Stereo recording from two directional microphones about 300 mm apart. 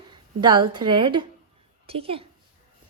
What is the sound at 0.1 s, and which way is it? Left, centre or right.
A woman's voice, centre.